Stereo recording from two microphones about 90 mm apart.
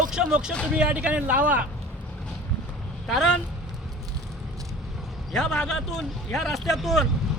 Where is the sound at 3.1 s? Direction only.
Centre (ahead or behind).